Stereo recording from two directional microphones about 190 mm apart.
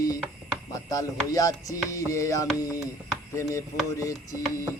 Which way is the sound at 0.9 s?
20° left (ahead or behind).